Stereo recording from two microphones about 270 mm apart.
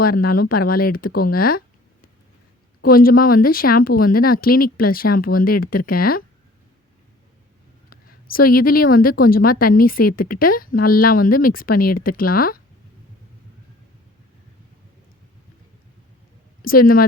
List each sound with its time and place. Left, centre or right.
0.0 s speech: left
7.9 s speech: left
16.6 s speech: left